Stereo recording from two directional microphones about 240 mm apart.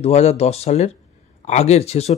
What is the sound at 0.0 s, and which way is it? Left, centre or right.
Speech, left.